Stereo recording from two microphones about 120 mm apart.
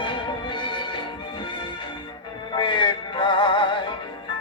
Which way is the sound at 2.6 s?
45° left (ahead or behind).